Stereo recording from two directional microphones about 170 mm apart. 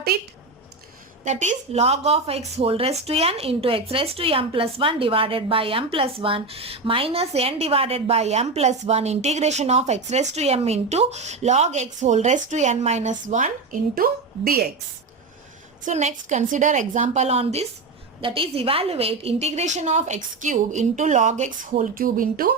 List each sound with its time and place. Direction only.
1.2 s a woman's voice: 45° right (ahead or behind)
13.9 s a woman's voice: 60° right (ahead or behind)
15.8 s a woman's voice: 40° right (ahead or behind)